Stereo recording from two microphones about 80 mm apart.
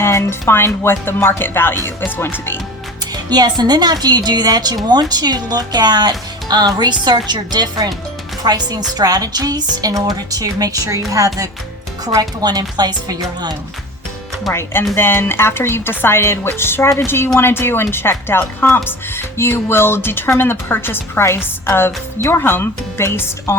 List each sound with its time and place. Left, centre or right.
0.0 s speech: left
3.2 s speech: right
12.0 s speech: right
14.5 s speech: left